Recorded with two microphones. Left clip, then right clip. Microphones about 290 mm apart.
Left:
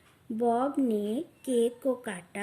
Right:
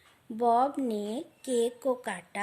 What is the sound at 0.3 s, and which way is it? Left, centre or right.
Speech, right.